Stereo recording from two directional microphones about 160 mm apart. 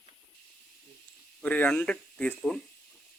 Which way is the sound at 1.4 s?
10° left (ahead or behind).